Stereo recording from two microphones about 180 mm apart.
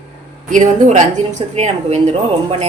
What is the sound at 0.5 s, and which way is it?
Speech, 45° right (ahead or behind).